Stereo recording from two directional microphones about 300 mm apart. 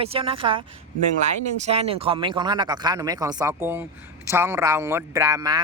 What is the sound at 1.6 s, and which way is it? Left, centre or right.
Speech, centre.